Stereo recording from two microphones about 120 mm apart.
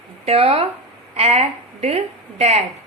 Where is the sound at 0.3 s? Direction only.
55° right (ahead or behind).